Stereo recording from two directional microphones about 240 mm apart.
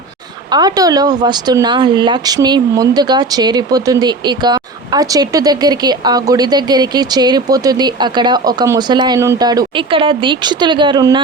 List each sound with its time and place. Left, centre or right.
0.5 s speech: centre